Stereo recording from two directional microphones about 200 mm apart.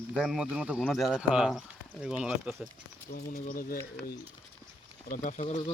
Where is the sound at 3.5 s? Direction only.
45° left (ahead or behind).